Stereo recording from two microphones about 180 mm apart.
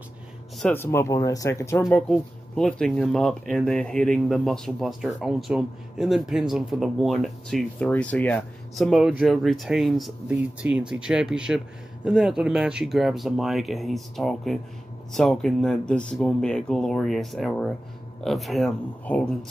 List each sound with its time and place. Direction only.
0.6 s speech: 10° left (ahead or behind)
2.0 s speech: 5° left (ahead or behind)